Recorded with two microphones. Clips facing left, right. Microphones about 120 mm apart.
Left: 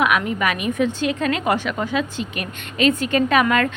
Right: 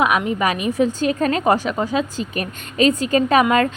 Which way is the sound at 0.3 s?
30° right (ahead or behind).